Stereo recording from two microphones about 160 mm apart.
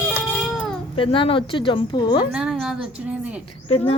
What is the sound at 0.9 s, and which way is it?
A woman's voice, 35° left (ahead or behind).